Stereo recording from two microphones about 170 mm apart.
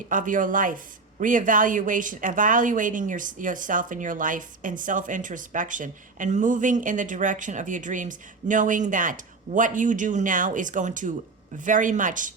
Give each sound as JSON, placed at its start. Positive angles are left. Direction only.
{"t": 0.1, "sound": "a woman's voice", "side_deg": -50}